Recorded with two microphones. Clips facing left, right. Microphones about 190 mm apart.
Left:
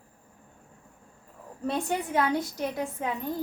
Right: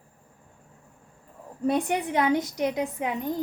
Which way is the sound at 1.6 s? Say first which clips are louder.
Right 4 dB; 15° right (ahead or behind).